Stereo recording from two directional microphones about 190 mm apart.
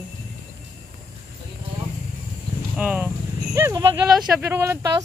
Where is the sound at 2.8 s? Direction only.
5° right (ahead or behind).